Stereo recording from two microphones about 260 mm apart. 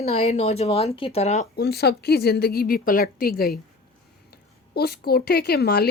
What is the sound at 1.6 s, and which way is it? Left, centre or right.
Speech, left.